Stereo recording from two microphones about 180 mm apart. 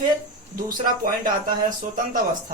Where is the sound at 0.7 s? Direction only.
50° right (ahead or behind).